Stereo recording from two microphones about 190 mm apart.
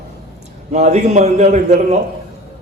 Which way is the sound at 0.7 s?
35° right (ahead or behind).